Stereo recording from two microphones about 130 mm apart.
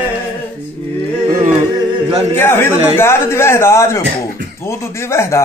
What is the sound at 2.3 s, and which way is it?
A man's voice, 15° left (ahead or behind).